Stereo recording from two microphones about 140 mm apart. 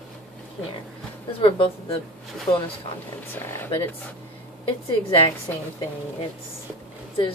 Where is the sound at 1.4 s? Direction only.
40° left (ahead or behind).